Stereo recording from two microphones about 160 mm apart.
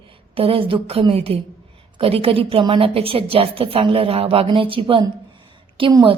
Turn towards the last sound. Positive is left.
turn(degrees=-30)  # may be behind; listen again after turning